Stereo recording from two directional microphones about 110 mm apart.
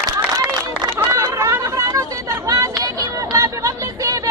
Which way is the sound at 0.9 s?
25° right (ahead or behind).